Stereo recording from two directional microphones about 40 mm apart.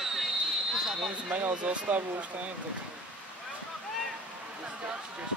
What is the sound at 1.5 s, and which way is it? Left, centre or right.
Speech, right.